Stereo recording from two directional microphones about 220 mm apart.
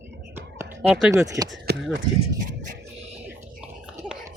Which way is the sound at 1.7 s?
50° right (ahead or behind).